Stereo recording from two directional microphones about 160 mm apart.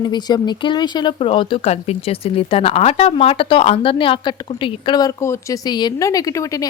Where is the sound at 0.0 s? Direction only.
25° left (ahead or behind).